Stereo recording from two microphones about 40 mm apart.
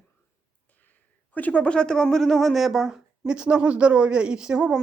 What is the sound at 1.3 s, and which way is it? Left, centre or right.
Speech, left.